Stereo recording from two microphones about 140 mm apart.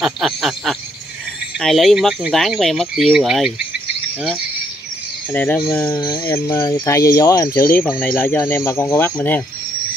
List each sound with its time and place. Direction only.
0.0 s a sound: centre (ahead or behind)
1.6 s speech: centre (ahead or behind)
5.3 s speech: 15° left (ahead or behind)